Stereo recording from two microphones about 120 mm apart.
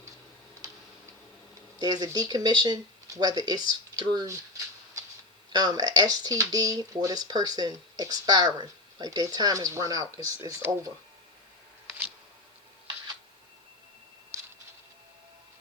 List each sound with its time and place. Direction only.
1.8 s speech: 30° right (ahead or behind)
5.5 s speech: 35° right (ahead or behind)
14.3 s a sound: 20° right (ahead or behind)